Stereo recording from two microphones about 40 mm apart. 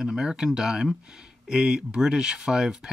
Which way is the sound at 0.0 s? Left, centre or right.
Centre.